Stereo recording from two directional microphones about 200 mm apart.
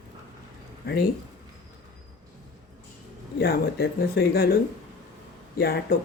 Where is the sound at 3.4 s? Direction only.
50° left (ahead or behind).